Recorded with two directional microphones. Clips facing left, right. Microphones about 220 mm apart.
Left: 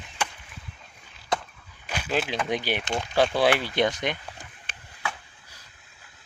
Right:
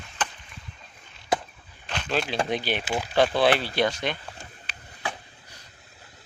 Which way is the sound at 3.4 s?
15° left (ahead or behind).